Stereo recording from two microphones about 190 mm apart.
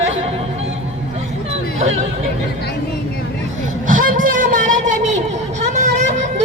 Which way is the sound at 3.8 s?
45° right (ahead or behind).